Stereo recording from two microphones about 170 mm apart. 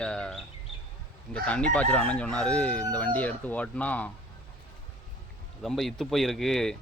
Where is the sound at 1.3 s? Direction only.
5° left (ahead or behind).